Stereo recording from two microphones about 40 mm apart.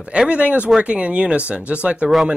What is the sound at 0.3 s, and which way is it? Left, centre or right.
Speech, right.